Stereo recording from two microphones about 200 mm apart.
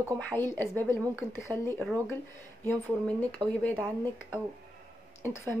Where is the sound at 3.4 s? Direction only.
25° right (ahead or behind).